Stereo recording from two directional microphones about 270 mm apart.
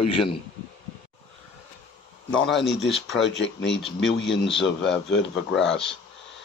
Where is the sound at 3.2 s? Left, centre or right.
Left.